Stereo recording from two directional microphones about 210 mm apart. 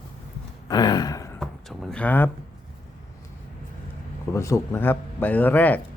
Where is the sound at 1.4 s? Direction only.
5° left (ahead or behind).